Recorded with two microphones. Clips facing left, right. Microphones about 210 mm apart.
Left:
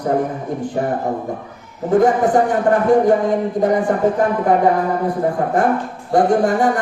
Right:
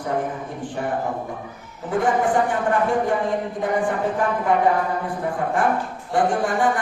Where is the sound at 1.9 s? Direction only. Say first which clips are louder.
Left 6 dB; 40° left (ahead or behind).